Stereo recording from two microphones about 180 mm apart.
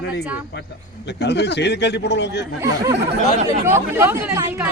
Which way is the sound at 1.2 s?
70° left (ahead or behind).